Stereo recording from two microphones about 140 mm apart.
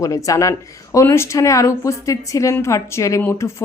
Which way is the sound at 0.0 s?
25° left (ahead or behind).